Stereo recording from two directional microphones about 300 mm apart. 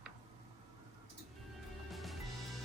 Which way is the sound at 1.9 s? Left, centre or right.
Centre.